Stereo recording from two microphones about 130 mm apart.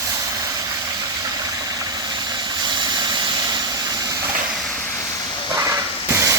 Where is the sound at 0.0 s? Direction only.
25° right (ahead or behind).